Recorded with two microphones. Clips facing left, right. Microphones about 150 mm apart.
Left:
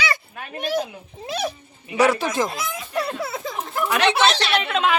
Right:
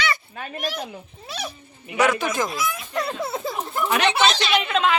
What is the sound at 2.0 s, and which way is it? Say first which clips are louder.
Speech: left 2 dB; 30° left (ahead or behind).